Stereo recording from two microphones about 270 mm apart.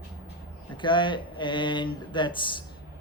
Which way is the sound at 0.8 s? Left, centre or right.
Centre.